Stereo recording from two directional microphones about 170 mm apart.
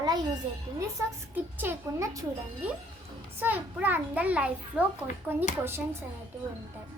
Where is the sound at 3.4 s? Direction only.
10° right (ahead or behind).